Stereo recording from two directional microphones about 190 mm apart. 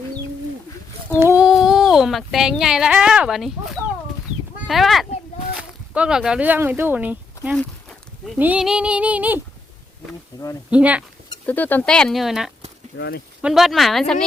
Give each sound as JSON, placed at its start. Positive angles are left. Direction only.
{"t": 1.1, "sound": "speech", "side_deg": -10}
{"t": 4.6, "sound": "speech", "side_deg": 0}
{"t": 8.4, "sound": "female singing", "side_deg": -5}
{"t": 10.3, "sound": "speech", "side_deg": 20}
{"t": 10.7, "sound": "female singing", "side_deg": -5}
{"t": 11.4, "sound": "speech", "side_deg": 10}
{"t": 13.0, "sound": "speech", "side_deg": 60}
{"t": 13.4, "sound": "speech", "side_deg": 0}